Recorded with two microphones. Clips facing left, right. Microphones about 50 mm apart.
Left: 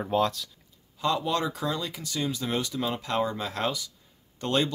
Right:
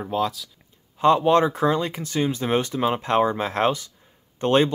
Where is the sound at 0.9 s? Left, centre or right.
Right.